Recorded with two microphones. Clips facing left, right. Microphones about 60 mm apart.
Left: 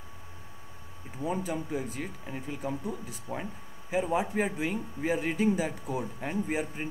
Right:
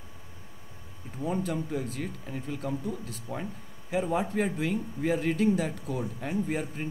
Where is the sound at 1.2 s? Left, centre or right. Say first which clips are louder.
Right 1 dB; centre.